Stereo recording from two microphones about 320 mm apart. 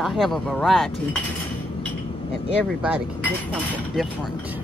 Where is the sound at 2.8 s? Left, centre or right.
Centre.